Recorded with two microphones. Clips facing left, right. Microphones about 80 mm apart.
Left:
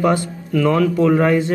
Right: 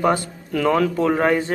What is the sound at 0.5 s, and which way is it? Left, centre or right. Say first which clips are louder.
Speech: left 2 dB; centre.